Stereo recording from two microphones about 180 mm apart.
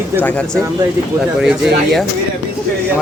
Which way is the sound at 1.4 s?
Centre (ahead or behind).